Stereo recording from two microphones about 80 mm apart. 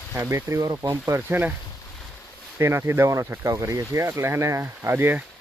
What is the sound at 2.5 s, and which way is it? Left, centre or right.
Speech, right.